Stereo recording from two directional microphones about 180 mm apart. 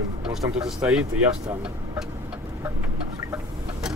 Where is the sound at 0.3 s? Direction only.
Centre (ahead or behind).